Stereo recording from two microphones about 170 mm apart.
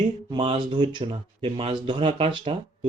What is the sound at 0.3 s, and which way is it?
Speech, 30° right (ahead or behind).